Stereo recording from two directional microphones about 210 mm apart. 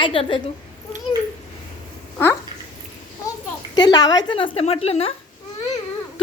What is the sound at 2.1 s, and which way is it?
Speech, 10° left (ahead or behind).